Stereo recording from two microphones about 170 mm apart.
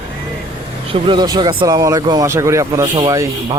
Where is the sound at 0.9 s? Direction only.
30° right (ahead or behind).